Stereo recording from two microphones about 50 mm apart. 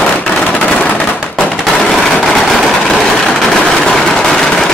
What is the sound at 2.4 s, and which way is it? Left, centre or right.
Vehicle, centre.